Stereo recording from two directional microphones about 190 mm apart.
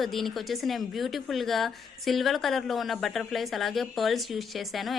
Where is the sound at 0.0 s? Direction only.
Centre (ahead or behind).